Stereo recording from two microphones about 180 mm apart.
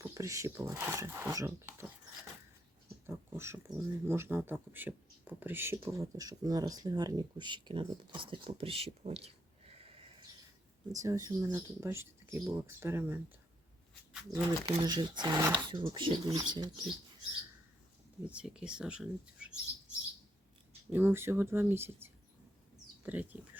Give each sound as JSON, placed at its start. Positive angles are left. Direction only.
{"t": 0.0, "sound": "speech", "side_deg": -15}
{"t": 3.1, "sound": "speech", "side_deg": -15}
{"t": 10.9, "sound": "speech", "side_deg": -15}
{"t": 14.1, "sound": "a sound", "side_deg": -5}
{"t": 14.7, "sound": "speech", "side_deg": -25}
{"t": 18.3, "sound": "speech", "side_deg": -5}
{"t": 20.9, "sound": "speech", "side_deg": -10}